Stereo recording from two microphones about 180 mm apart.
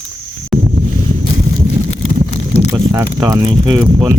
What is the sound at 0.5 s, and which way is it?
Boat, centre (ahead or behind).